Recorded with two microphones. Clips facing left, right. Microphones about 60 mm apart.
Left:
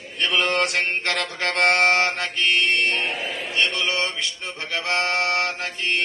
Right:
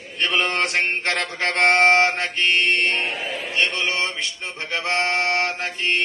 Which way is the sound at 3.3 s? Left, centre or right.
Right.